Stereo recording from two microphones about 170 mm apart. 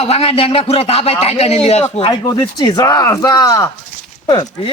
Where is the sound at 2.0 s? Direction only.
20° left (ahead or behind).